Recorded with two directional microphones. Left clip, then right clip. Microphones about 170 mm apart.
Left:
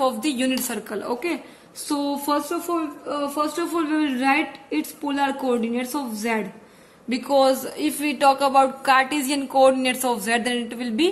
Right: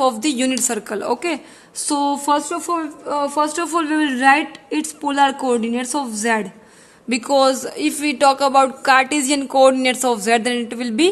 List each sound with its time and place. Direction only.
0.0 s speech: 50° right (ahead or behind)